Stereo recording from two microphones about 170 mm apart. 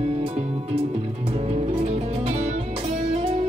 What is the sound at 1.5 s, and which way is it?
Music, 35° right (ahead or behind).